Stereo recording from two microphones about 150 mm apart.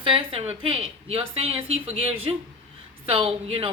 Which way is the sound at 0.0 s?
35° right (ahead or behind).